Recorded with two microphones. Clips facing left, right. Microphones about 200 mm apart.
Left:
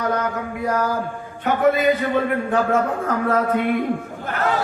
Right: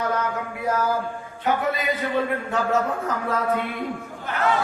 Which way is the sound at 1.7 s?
50° left (ahead or behind).